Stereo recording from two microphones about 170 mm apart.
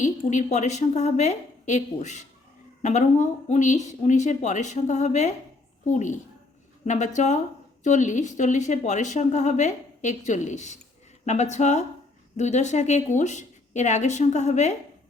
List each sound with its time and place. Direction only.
0.0 s a woman's voice: 45° left (ahead or behind)